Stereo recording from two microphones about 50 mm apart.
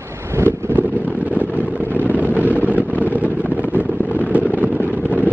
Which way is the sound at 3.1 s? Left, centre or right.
Right.